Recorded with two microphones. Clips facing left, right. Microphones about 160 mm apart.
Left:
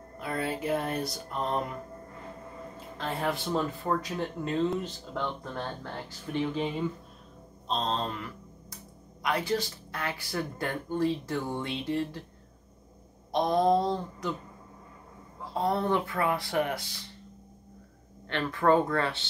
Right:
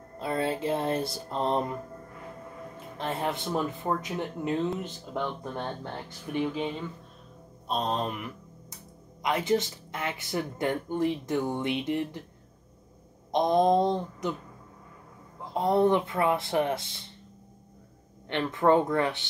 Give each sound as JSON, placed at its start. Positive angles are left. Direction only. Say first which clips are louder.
{"t": 0.2, "sound": "music", "louder": "right 3 dB", "side_deg": -25}
{"t": 3.0, "sound": "speech", "louder": "right 1 dB", "side_deg": -20}
{"t": 7.6, "sound": "speech", "louder": "right 1 dB", "side_deg": -15}
{"t": 13.3, "sound": "speech", "louder": "right 2 dB", "side_deg": -20}
{"t": 15.4, "sound": "speech", "louder": "right 5 dB", "side_deg": -20}
{"t": 18.3, "sound": "speech", "louder": "right 1 dB", "side_deg": -20}